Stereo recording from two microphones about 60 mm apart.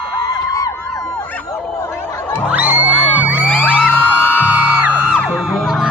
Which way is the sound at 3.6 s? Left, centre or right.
Left.